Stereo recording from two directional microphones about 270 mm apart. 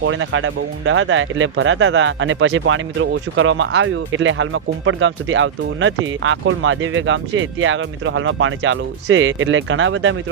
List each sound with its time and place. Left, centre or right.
0.0 s speech: right